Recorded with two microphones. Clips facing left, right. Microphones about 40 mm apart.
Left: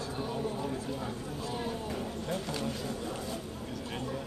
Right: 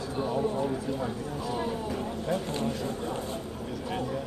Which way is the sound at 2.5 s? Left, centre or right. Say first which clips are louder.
Right 4 dB; right.